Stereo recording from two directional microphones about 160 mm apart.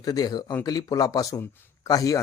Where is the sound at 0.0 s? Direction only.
25° left (ahead or behind).